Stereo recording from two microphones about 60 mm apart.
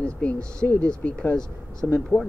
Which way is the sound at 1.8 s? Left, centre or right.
Left.